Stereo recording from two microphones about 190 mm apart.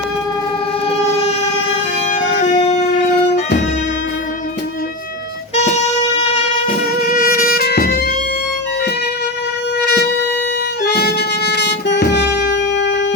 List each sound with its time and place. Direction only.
0.9 s train: 35° left (ahead or behind)
2.4 s music: 35° left (ahead or behind)
5.5 s music: 35° left (ahead or behind)
7.1 s music: 50° left (ahead or behind)
9.8 s music: 60° left (ahead or behind)
12.4 s wind instrument: 65° left (ahead or behind)